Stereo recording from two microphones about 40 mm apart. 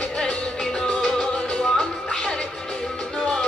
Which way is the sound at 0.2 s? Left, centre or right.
Left.